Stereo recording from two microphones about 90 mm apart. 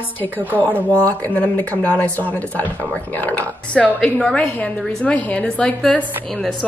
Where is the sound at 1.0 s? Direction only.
15° left (ahead or behind).